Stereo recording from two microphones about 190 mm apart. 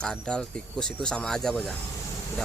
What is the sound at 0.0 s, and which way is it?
Speech, 5° left (ahead or behind).